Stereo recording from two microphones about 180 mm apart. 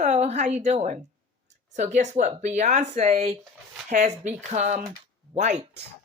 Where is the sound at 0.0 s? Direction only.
40° right (ahead or behind).